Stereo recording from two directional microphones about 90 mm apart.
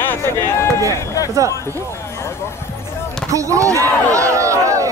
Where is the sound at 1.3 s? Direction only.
40° right (ahead or behind).